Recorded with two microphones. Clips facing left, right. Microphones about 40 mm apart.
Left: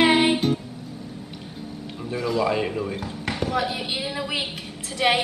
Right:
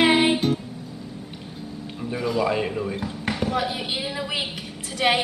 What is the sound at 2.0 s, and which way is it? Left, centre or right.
A man's voice, centre.